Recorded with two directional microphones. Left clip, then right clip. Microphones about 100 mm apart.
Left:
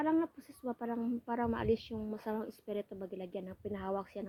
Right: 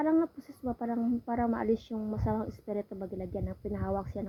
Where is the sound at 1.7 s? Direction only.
25° right (ahead or behind); by 4.0 s 10° right (ahead or behind).